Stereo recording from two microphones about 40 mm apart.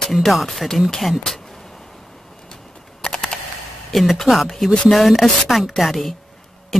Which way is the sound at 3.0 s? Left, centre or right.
Centre.